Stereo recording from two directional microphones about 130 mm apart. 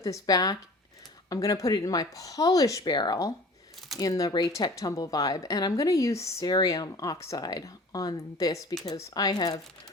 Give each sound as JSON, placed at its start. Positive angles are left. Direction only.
{"t": 0.0, "sound": "speech", "side_deg": 25}